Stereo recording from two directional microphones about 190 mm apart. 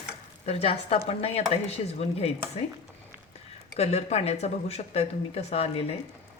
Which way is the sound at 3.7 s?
35° left (ahead or behind).